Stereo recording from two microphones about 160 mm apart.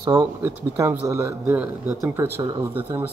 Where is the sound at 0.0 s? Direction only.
15° right (ahead or behind).